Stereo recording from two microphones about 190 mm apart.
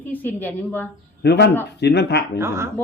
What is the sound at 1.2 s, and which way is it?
A man's voice, 60° left (ahead or behind).